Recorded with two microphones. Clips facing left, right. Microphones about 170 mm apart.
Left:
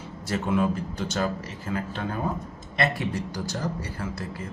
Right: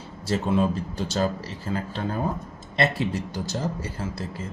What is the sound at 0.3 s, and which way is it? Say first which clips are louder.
A man's voice: right 2 dB; 30° right (ahead or behind).